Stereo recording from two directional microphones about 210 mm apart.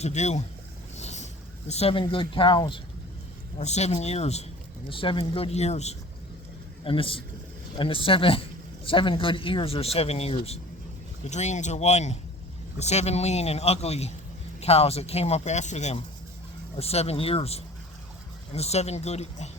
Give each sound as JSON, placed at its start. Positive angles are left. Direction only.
{"t": 0.0, "sound": "speech", "side_deg": 35}
{"t": 0.9, "sound": "boat", "side_deg": 30}
{"t": 1.6, "sound": "speech", "side_deg": 30}